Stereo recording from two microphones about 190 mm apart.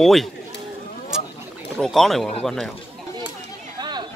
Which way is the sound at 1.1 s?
5° right (ahead or behind).